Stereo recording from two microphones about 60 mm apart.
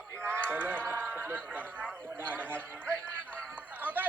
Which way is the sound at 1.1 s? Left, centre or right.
Right.